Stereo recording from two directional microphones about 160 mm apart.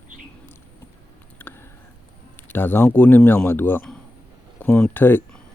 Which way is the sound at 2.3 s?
10° left (ahead or behind).